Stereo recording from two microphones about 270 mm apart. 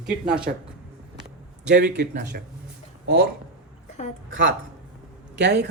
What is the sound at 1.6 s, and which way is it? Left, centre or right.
Speech, right.